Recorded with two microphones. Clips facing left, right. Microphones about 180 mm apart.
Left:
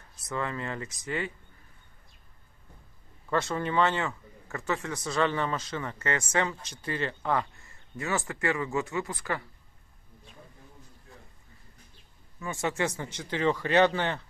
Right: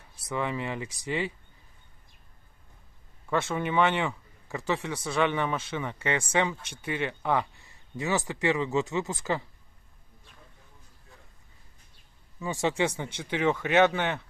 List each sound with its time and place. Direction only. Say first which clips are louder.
0.0 s speech: right 2 dB; 15° right (ahead or behind)
3.3 s speech: right 1 dB; 5° right (ahead or behind)
12.4 s speech: right 3 dB; 15° right (ahead or behind)